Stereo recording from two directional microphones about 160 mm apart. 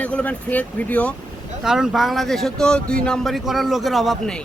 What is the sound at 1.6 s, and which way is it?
A man's voice, 5° right (ahead or behind).